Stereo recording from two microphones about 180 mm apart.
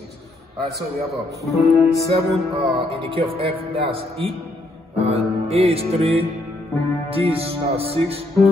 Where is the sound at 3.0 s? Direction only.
30° right (ahead or behind).